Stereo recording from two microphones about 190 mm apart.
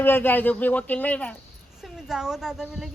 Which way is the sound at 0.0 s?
10° left (ahead or behind).